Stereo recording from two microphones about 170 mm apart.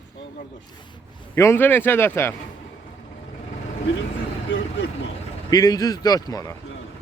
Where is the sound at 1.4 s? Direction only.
15° left (ahead or behind).